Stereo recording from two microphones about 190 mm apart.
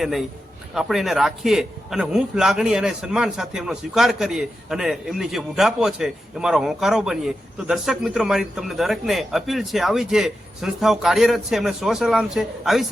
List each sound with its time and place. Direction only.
0.0 s a man's voice: centre (ahead or behind)